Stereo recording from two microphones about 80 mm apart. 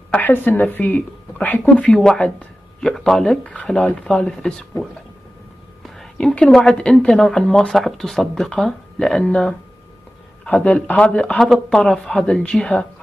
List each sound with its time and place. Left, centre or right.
0.1 s speech: left
1.6 s speech: centre
6.1 s speech: centre